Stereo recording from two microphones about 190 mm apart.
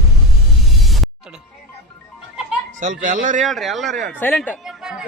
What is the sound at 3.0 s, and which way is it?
Speech, 45° right (ahead or behind).